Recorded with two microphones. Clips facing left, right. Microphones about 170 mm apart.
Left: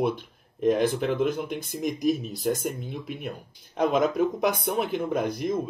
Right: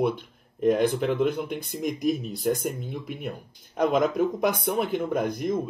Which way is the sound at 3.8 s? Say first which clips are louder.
Even; 50° right (ahead or behind).